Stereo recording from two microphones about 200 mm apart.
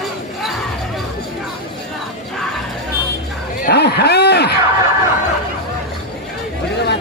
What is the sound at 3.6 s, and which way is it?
Speech, 55° left (ahead or behind).